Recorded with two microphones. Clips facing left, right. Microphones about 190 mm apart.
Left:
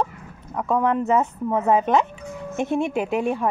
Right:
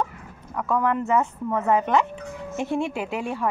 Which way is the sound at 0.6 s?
20° left (ahead or behind).